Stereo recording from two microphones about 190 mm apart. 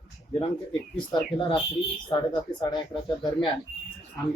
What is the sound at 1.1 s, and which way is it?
Speech, 25° left (ahead or behind).